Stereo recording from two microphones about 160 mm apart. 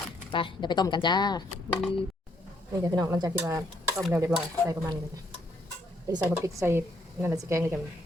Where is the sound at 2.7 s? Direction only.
20° right (ahead or behind).